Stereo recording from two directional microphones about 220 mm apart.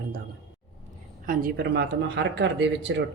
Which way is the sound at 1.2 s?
45° right (ahead or behind).